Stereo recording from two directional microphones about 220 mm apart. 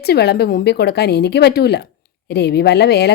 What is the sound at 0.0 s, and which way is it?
A woman's voice, 45° left (ahead or behind).